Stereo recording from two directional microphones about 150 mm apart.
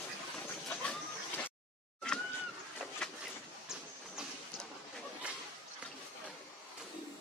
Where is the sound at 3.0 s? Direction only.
5° left (ahead or behind).